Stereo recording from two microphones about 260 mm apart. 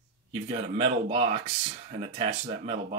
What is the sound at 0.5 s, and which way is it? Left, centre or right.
Speech, right.